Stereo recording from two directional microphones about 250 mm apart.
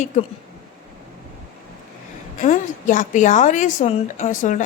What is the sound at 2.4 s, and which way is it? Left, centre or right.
A woman's voice, left.